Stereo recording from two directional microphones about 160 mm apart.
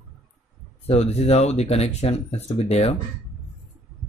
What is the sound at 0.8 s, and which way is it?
Speech, 40° left (ahead or behind).